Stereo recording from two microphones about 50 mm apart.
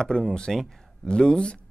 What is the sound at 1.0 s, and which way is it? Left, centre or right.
Speech, centre.